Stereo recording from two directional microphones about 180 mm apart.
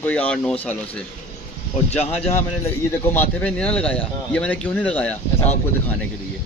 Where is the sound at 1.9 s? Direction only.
35° left (ahead or behind).